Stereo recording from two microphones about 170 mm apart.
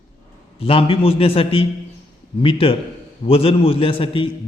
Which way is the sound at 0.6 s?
35° left (ahead or behind).